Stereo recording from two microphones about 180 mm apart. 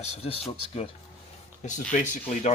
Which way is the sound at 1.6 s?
40° left (ahead or behind).